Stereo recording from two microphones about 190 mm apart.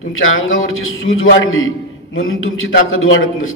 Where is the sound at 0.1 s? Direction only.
90° left.